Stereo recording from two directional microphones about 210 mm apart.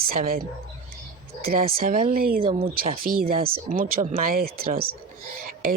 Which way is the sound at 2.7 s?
45° right (ahead or behind).